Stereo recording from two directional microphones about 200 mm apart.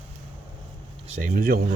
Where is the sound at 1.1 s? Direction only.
40° right (ahead or behind).